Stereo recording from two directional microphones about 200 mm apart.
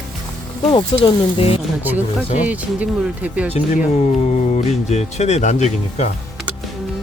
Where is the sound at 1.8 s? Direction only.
10° right (ahead or behind).